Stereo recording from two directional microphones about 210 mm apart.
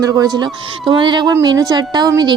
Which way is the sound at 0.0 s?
20° right (ahead or behind).